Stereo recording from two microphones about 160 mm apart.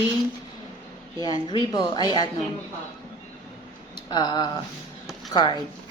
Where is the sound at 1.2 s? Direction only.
25° left (ahead or behind).